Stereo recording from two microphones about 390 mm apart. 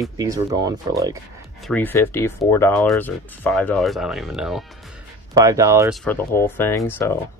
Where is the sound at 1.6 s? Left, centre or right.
Centre.